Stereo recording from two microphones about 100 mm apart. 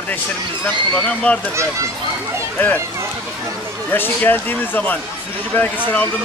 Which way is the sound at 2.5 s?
20° left (ahead or behind).